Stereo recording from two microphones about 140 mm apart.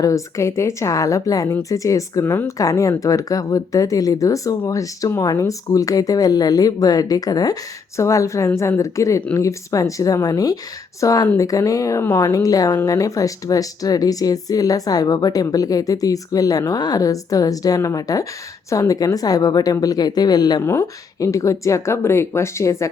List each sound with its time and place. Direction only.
0.0 s speech: 20° left (ahead or behind)